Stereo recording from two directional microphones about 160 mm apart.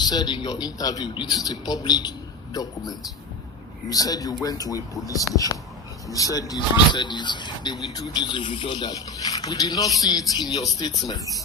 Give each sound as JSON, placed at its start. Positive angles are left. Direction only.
{"t": 0.0, "sound": "speech", "side_deg": 25}